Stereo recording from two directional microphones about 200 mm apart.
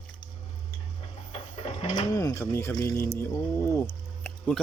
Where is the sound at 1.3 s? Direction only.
30° left (ahead or behind).